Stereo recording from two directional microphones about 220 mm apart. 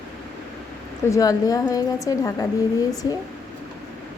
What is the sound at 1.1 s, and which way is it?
A woman's voice, 15° left (ahead or behind).